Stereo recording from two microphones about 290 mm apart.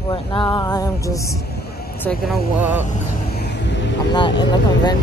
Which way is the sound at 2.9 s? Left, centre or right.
Left.